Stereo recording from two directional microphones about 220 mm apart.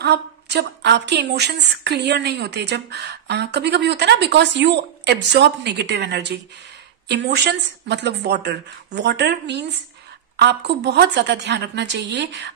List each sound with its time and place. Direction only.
0.0 s a woman's voice: 50° right (ahead or behind)